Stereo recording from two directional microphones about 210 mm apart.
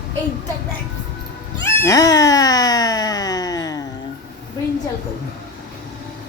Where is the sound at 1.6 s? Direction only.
10° left (ahead or behind).